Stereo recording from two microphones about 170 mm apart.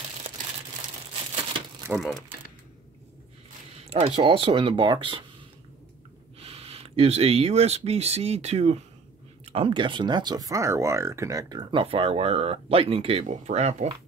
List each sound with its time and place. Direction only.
1.9 s speech: 5° right (ahead or behind)
3.8 s speech: 35° right (ahead or behind)
6.4 s speech: 35° right (ahead or behind)